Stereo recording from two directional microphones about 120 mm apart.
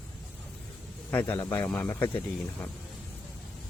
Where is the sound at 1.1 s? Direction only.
15° left (ahead or behind).